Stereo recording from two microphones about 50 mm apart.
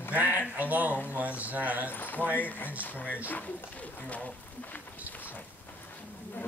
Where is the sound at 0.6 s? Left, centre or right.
Right.